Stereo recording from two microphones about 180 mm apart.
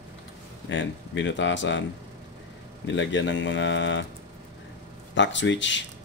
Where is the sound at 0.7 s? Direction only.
90° left.